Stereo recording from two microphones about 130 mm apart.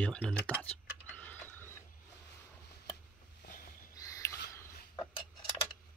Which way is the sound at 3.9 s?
25° left (ahead or behind).